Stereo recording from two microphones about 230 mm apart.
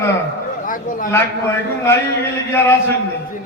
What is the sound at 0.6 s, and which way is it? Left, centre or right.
Speech, left.